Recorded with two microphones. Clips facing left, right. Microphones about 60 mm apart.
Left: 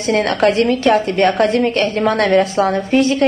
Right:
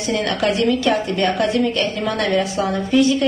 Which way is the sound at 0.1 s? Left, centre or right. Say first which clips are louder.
Left 6 dB; left.